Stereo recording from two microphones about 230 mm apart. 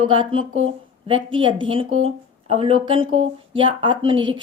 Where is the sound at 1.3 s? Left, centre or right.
Right.